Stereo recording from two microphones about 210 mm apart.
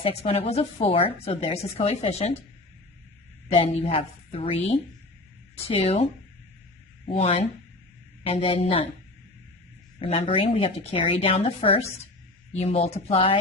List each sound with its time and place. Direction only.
0.0 s a woman's voice: 30° left (ahead or behind)
3.5 s a woman's voice: 25° left (ahead or behind)
10.0 s a woman's voice: 25° left (ahead or behind)